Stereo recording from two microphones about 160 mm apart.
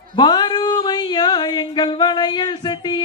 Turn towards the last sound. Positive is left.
turn(degrees=30)  # may be behind; listen again after turning